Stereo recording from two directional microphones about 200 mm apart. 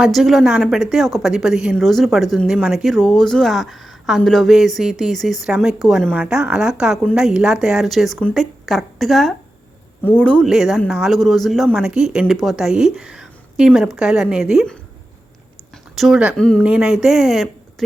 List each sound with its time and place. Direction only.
0.0 s a woman's voice: centre (ahead or behind)
16.0 s a woman's voice: 5° right (ahead or behind)